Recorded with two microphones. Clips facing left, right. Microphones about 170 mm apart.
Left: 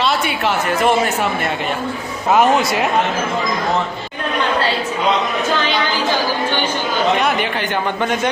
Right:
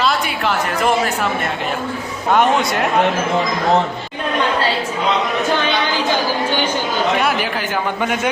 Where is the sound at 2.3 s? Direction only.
5° left (ahead or behind).